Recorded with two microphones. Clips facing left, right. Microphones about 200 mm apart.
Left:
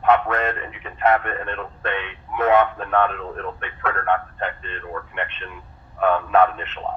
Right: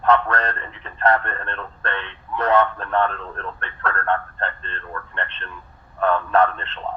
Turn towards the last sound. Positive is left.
turn(degrees=15)  # may be behind; listen again after turning